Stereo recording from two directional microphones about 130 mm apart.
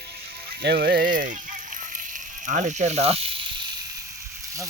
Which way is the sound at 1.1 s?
90° right.